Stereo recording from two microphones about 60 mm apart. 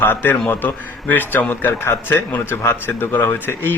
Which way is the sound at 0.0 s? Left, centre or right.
Left.